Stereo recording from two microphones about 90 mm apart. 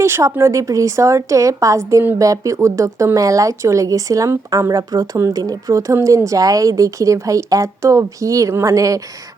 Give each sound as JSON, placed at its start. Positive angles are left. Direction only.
{"t": 0.0, "sound": "speech", "side_deg": -30}